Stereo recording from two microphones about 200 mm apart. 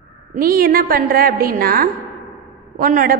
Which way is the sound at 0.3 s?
45° right (ahead or behind).